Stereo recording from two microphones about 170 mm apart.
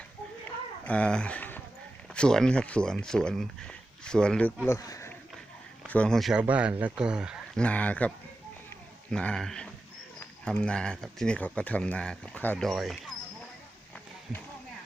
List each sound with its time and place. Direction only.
0.4 s a sound: 5° left (ahead or behind)
2.1 s speech: 5° left (ahead or behind)
4.6 s speech: 20° left (ahead or behind)
5.8 s speech: 5° left (ahead or behind)
7.6 s speech: 10° left (ahead or behind)